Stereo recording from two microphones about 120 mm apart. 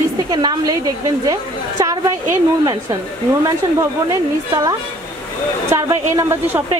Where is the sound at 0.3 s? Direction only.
35° right (ahead or behind).